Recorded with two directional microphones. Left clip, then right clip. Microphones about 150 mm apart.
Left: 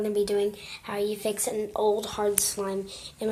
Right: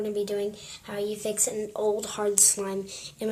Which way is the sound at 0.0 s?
25° left (ahead or behind).